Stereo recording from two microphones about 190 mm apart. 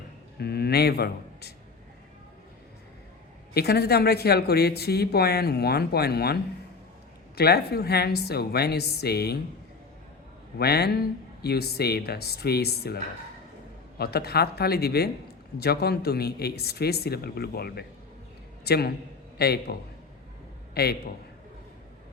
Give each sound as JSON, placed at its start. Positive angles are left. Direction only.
{"t": 0.3, "sound": "a man's voice", "side_deg": 55}
{"t": 3.5, "sound": "speech", "side_deg": 55}
{"t": 10.6, "sound": "speech", "side_deg": 55}
{"t": 14.0, "sound": "a man's voice", "side_deg": 55}